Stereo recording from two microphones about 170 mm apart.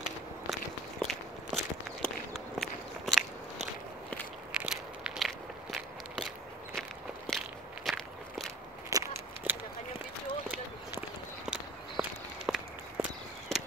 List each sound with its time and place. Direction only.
0.5 s walk: centre (ahead or behind)
4.6 s crackle: 5° right (ahead or behind)
6.7 s walk: centre (ahead or behind)
8.9 s a sound: 15° right (ahead or behind)
11.4 s walk: 5° right (ahead or behind)